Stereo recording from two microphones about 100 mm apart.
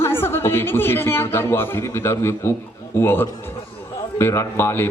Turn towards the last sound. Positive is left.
turn(degrees=25)  # may be behind; listen again after turning